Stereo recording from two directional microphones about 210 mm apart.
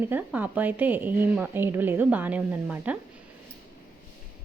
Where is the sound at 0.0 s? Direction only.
10° right (ahead or behind).